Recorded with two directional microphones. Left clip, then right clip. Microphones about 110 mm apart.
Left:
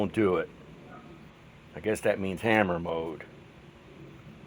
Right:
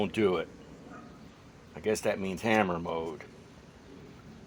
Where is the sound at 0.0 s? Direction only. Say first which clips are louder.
Left 2 dB; 90° left.